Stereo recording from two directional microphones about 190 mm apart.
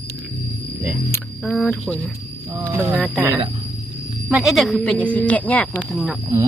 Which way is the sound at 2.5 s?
10° right (ahead or behind).